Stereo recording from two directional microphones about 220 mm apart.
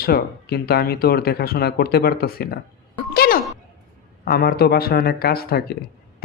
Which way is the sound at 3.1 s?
45° left (ahead or behind).